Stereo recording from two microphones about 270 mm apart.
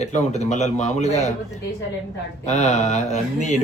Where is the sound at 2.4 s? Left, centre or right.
Left.